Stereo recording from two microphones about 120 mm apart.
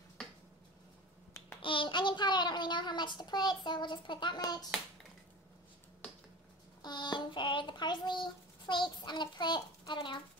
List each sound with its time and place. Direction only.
1.6 s child singing: 45° left (ahead or behind)
6.8 s child singing: 40° left (ahead or behind)